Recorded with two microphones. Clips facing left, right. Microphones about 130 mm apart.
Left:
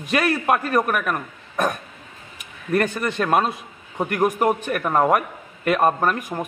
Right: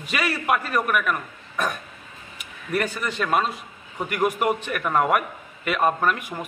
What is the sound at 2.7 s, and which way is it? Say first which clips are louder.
A man's voice: left 4 dB; 50° left (ahead or behind).